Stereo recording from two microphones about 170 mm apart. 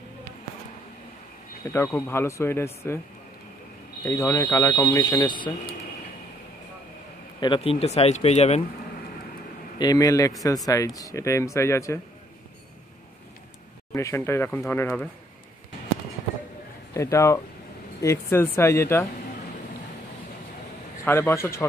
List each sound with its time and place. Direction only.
1.6 s speech: 15° left (ahead or behind)
4.0 s speech: 15° left (ahead or behind)
7.3 s speech: 30° left (ahead or behind)
9.8 s speech: 20° left (ahead or behind)
13.9 s speech: 15° left (ahead or behind)
16.9 s speech: 15° left (ahead or behind)
21.0 s speech: 15° left (ahead or behind)